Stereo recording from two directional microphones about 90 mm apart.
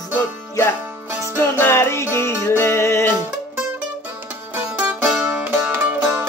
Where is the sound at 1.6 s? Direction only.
25° left (ahead or behind).